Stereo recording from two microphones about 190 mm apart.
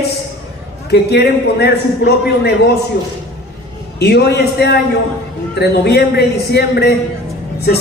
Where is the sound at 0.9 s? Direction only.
60° left (ahead or behind).